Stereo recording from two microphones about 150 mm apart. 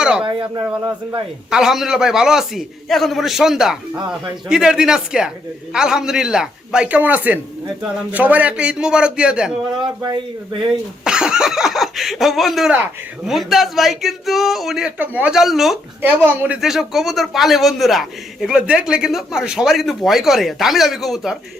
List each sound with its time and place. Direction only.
0.0 s speech: 5° right (ahead or behind)
0.3 s speech: 35° right (ahead or behind)
1.5 s a man's voice: 5° right (ahead or behind)
9.8 s speech: 30° right (ahead or behind)
11.0 s speech: 5° right (ahead or behind)
16.0 s a man's voice: 15° right (ahead or behind)
16.6 s speech: centre (ahead or behind)